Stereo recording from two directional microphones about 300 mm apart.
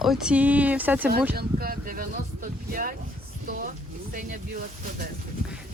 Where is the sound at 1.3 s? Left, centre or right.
Right.